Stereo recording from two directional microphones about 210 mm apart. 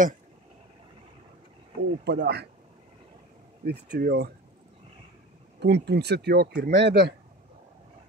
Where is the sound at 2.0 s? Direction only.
50° right (ahead or behind).